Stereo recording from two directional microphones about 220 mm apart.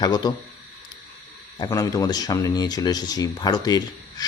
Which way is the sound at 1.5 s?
20° left (ahead or behind).